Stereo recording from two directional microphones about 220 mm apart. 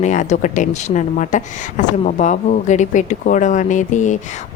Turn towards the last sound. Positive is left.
turn(degrees=35)  # may be behind; listen again after turning